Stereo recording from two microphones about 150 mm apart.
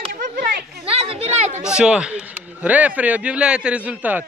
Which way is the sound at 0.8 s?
40° right (ahead or behind).